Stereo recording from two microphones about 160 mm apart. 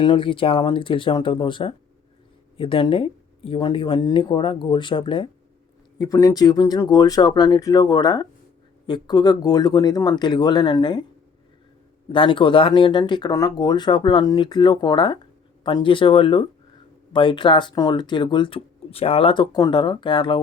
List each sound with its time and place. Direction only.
0.0 s speech: 30° left (ahead or behind)
12.0 s speech: 30° left (ahead or behind)